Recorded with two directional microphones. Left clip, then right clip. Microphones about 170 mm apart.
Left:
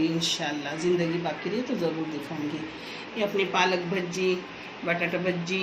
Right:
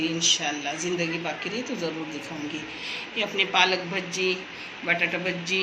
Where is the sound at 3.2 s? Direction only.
40° left (ahead or behind).